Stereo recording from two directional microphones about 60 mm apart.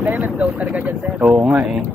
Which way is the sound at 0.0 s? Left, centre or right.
Right.